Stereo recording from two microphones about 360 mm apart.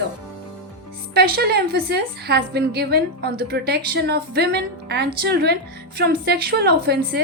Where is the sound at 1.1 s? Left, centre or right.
Right.